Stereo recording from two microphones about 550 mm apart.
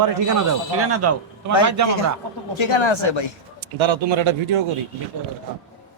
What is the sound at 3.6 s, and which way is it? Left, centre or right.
Speech, right.